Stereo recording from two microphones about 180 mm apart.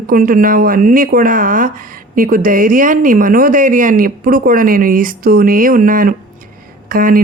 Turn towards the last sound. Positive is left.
turn(degrees=-50)  # may be behind; listen again after turning